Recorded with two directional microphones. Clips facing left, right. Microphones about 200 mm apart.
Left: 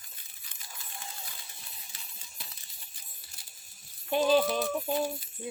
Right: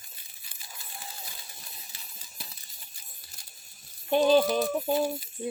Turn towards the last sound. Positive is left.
turn(degrees=-10)  # may be behind; listen again after turning